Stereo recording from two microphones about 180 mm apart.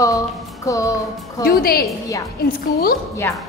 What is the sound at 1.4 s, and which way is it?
Speech, 55° left (ahead or behind).